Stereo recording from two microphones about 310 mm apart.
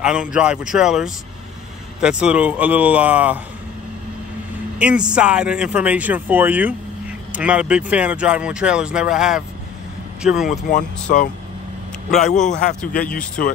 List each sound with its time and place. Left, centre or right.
0.0 s speech: centre
4.7 s speech: centre
10.7 s a man's voice: left